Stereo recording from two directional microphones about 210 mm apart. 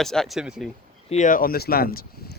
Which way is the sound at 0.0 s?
Centre (ahead or behind).